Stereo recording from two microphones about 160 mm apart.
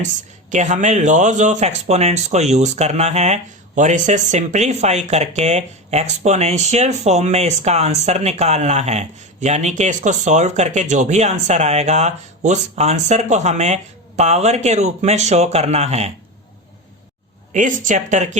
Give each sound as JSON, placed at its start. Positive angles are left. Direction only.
{"t": 0.5, "sound": "speech", "side_deg": -50}
{"t": 17.5, "sound": "speech", "side_deg": -50}